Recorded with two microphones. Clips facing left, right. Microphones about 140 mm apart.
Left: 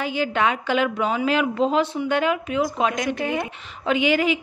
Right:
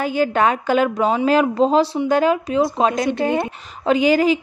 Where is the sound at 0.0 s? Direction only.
45° right (ahead or behind).